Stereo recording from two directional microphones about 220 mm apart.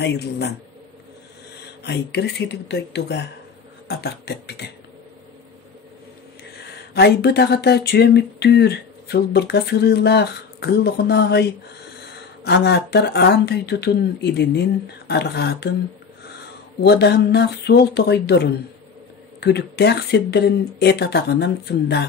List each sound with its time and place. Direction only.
0.0 s speech: 50° left (ahead or behind)
1.8 s speech: 50° left (ahead or behind)
6.6 s speech: 50° left (ahead or behind)
12.4 s speech: 50° left (ahead or behind)
16.8 s speech: 50° left (ahead or behind)